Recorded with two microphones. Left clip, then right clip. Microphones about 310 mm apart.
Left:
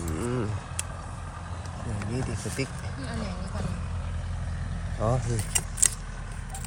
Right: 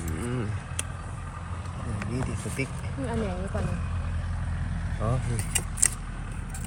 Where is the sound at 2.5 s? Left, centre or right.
Left.